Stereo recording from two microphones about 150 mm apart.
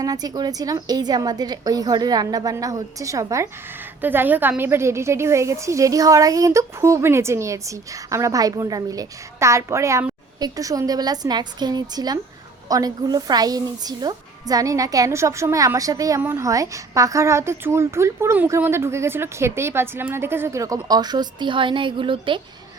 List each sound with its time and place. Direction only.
0.0 s a woman's voice: 25° right (ahead or behind)